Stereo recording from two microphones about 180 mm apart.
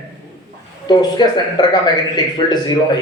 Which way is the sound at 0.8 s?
25° left (ahead or behind).